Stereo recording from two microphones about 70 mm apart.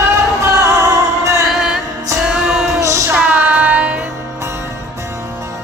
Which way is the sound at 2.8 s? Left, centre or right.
Right.